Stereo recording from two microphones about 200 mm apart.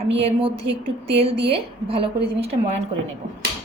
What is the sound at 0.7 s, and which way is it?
A woman's voice, 30° right (ahead or behind).